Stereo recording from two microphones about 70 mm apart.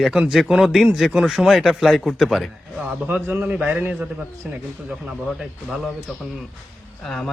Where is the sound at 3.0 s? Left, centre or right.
Right; by 5.8 s centre.